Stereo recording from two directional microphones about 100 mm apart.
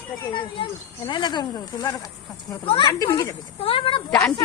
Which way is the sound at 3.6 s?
65° left (ahead or behind).